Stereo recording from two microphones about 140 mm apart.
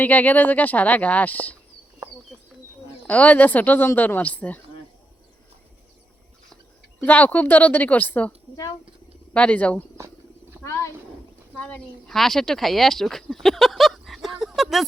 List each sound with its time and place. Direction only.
0.0 s speech: 10° left (ahead or behind)
3.1 s speech: 10° left (ahead or behind)
7.0 s speech: 10° left (ahead or behind)
9.3 s speech: 10° left (ahead or behind)
14.4 s a sound: centre (ahead or behind)